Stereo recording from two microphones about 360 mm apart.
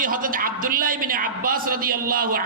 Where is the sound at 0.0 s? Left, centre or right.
Right.